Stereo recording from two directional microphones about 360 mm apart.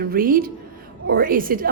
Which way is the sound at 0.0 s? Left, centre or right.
Right.